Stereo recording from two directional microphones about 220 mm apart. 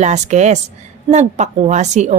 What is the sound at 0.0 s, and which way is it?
A woman's voice, 30° right (ahead or behind).